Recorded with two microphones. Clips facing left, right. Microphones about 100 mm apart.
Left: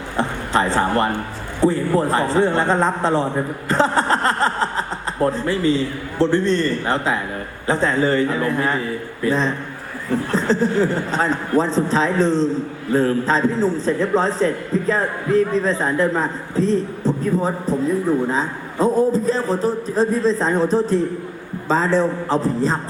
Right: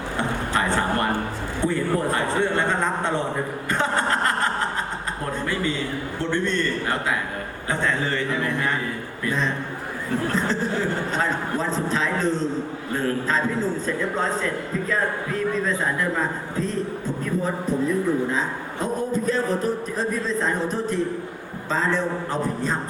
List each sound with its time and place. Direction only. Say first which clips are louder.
1.6 s a man's voice: left 6 dB; 30° left (ahead or behind)
3.7 s chuckle: left 6 dB; 30° left (ahead or behind)
5.2 s a man's voice: left 9 dB; 30° left (ahead or behind)